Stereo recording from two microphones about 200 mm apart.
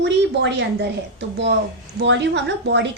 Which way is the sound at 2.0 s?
60° right (ahead or behind).